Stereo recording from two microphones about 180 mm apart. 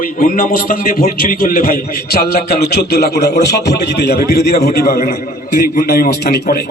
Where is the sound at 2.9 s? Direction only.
65° left (ahead or behind).